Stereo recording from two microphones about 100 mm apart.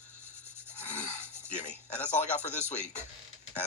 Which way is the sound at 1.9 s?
15° left (ahead or behind).